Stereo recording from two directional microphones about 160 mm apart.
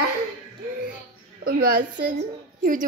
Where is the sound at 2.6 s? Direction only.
55° right (ahead or behind).